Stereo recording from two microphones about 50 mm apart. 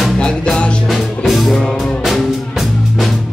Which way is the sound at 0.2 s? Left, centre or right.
Left.